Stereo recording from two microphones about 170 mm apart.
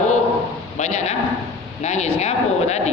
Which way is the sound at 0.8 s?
45° left (ahead or behind).